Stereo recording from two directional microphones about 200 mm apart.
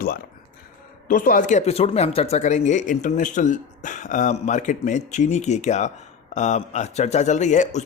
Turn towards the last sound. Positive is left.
turn(degrees=35)  # may be behind; listen again after turning